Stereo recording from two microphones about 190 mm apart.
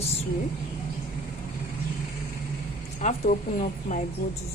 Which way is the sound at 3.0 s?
35° left (ahead or behind).